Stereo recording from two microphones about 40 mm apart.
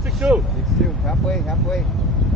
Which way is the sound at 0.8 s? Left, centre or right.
Centre.